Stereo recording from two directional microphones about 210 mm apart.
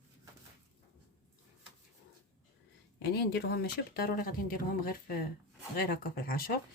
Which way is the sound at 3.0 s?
50° left (ahead or behind).